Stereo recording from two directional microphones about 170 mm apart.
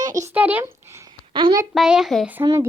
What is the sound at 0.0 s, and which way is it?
A child's voice, 20° right (ahead or behind).